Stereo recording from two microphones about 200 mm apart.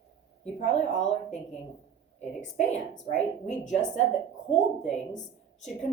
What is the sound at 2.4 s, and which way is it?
A woman's voice, 35° left (ahead or behind).